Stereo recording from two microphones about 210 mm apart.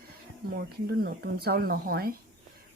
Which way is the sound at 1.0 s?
50° right (ahead or behind).